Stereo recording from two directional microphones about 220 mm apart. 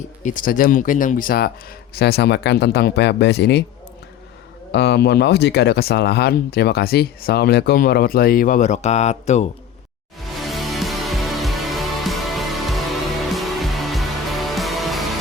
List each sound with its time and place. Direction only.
0.2 s speech: 35° left (ahead or behind)
4.7 s speech: 50° left (ahead or behind); by 9.5 s 30° left (ahead or behind)
10.4 s music: centre (ahead or behind)